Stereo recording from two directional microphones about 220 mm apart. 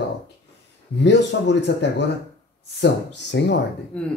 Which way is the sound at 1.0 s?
50° left (ahead or behind).